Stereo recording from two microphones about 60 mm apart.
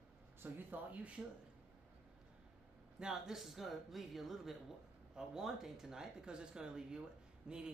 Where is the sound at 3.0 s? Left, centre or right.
Centre.